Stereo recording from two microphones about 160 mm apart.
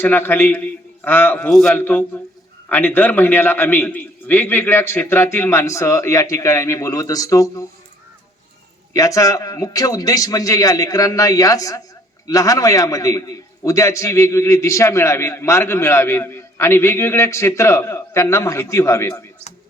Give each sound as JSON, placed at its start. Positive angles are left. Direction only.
{"t": 0.0, "sound": "a man's voice", "side_deg": 15}
{"t": 9.0, "sound": "a man's voice", "side_deg": 20}